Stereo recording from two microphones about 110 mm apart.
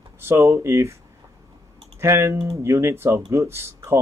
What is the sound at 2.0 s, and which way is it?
Speech, 25° right (ahead or behind).